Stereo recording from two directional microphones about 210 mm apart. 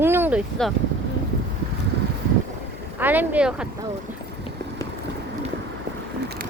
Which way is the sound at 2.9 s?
10° right (ahead or behind).